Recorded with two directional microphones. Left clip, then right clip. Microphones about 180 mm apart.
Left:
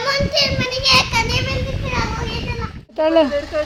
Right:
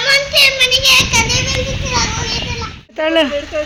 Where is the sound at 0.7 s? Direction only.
75° left (ahead or behind).